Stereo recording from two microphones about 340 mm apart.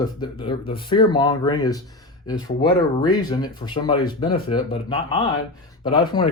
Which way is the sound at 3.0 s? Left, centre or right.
Centre.